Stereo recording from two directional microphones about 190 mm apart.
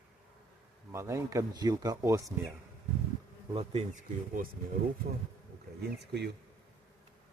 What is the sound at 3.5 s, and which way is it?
Speech, 30° right (ahead or behind).